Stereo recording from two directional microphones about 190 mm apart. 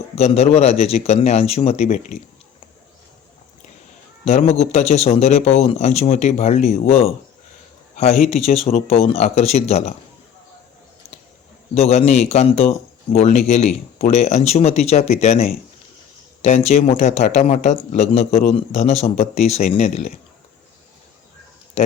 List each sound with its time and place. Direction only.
0.2 s speech: 35° left (ahead or behind)
4.3 s speech: 35° left (ahead or behind)
8.1 s speech: 40° left (ahead or behind)
11.7 s speech: 35° left (ahead or behind)